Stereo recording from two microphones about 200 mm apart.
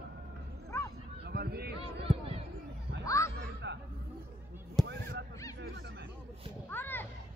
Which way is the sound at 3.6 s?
60° right (ahead or behind).